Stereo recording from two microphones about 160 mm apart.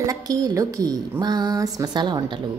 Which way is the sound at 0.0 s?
20° right (ahead or behind).